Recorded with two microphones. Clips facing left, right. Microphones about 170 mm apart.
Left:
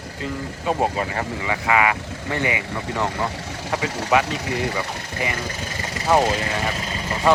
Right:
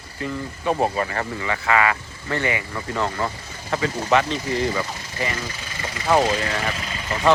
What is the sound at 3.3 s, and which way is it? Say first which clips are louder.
Vehicle: left 7 dB; 80° left.